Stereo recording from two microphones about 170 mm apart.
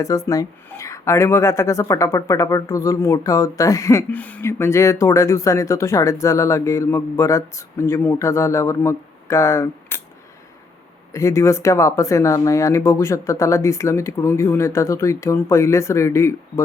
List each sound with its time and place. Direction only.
0.3 s a woman's voice: 20° left (ahead or behind)
11.1 s a woman's voice: 15° left (ahead or behind)